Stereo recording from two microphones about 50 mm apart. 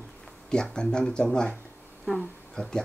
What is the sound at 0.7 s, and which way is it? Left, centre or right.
Speech, centre.